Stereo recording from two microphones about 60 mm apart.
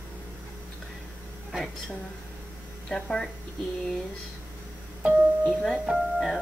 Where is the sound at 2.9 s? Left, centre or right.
Centre.